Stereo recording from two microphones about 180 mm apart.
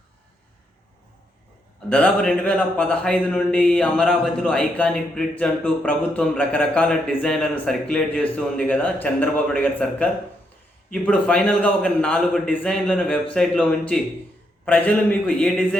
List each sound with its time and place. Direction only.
1.9 s a man's voice: 5° left (ahead or behind)